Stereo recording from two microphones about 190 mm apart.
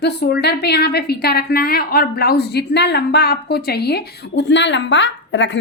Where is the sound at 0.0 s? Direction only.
60° left (ahead or behind).